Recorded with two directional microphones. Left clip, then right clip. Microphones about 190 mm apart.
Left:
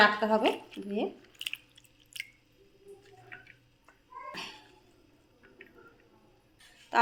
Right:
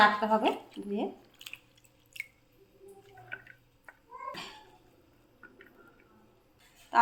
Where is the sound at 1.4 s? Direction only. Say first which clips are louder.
Left 9 dB; 15° left (ahead or behind).